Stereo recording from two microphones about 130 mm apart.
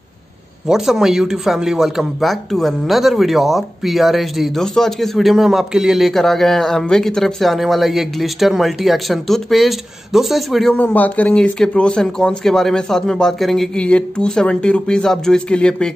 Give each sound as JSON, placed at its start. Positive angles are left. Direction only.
{"t": 0.7, "sound": "speech", "side_deg": -5}